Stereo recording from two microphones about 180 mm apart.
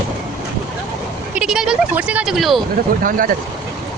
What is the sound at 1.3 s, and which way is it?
Speech, 5° right (ahead or behind).